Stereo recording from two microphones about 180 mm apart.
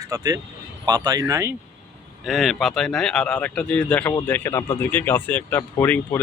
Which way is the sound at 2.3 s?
Centre (ahead or behind).